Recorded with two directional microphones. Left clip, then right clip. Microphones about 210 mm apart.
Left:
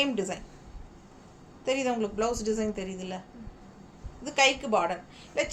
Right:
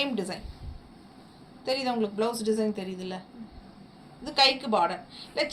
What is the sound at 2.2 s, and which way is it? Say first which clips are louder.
Speech: right 1 dB; 15° right (ahead or behind).